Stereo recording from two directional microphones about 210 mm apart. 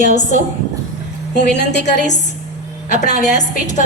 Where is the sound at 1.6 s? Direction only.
55° left (ahead or behind).